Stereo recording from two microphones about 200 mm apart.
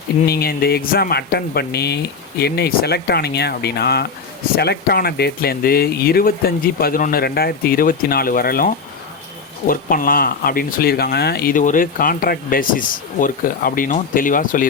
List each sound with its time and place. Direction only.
0.3 s speech: 50° left (ahead or behind)